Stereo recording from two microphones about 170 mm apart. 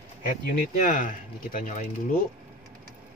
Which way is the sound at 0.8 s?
50° left (ahead or behind).